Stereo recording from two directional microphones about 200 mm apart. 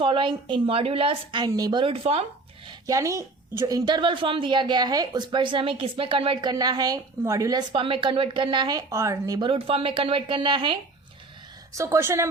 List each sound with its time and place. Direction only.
0.0 s a woman's voice: 25° right (ahead or behind)
2.6 s a woman's voice: 15° right (ahead or behind)